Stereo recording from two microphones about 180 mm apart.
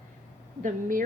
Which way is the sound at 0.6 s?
50° right (ahead or behind).